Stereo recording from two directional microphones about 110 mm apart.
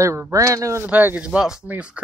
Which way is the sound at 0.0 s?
25° right (ahead or behind).